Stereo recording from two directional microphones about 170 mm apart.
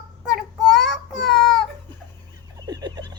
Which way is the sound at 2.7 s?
25° right (ahead or behind).